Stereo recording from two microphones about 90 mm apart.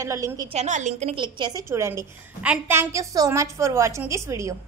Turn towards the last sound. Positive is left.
turn(degrees=-35)  # may be behind; listen again after turning